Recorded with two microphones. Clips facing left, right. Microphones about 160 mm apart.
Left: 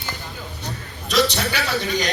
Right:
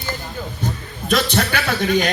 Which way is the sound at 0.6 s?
50° right (ahead or behind).